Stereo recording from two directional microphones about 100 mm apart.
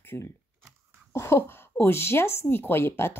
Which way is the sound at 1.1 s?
25° left (ahead or behind).